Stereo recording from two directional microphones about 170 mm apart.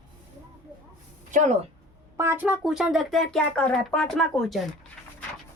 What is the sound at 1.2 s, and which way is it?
Speech, 45° right (ahead or behind).